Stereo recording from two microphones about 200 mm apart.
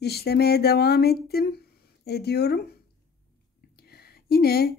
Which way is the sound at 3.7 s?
50° left (ahead or behind).